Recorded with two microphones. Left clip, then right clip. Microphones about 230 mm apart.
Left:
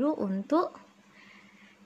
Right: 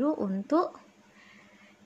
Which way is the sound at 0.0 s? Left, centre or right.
Centre.